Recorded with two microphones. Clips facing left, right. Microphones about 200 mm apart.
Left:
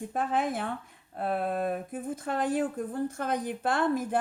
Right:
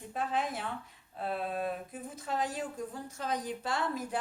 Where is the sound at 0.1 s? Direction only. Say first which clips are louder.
Left 4 dB; 50° left (ahead or behind).